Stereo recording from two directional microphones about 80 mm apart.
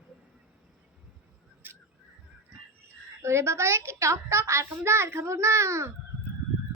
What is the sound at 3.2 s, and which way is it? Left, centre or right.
A child's voice, right.